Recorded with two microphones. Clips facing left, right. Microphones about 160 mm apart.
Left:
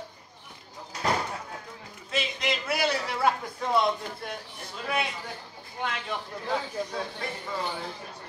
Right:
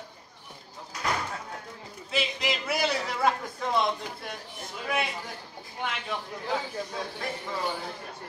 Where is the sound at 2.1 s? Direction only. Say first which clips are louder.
Even; centre (ahead or behind).